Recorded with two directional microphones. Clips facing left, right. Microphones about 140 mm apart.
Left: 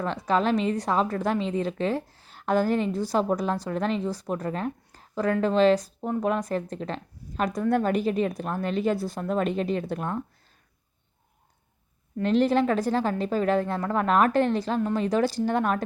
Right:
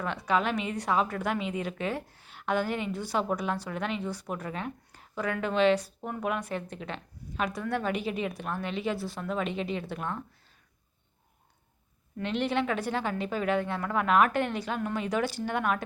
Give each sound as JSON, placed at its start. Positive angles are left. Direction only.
{"t": 0.0, "sound": "a woman's voice", "side_deg": 35}
{"t": 12.1, "sound": "a woman's voice", "side_deg": 35}